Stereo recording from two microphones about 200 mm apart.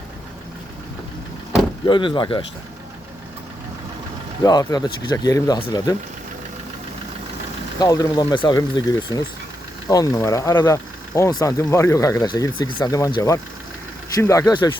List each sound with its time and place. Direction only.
1.5 s speech: 25° left (ahead or behind)
4.4 s speech: 20° left (ahead or behind)
7.8 s speech: 20° left (ahead or behind)